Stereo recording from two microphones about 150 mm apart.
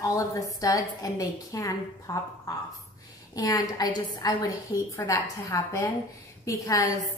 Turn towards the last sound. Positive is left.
turn(degrees=20)  # may be behind; listen again after turning